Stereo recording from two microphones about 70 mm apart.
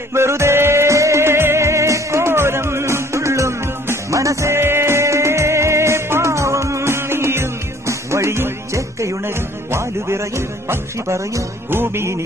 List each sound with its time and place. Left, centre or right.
0.1 s music: right